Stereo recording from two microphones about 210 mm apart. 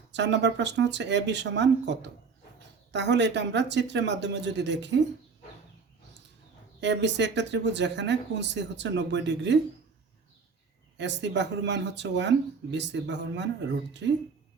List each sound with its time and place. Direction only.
0.1 s speech: 55° right (ahead or behind)
6.7 s speech: 55° right (ahead or behind)
10.9 s speech: 55° right (ahead or behind)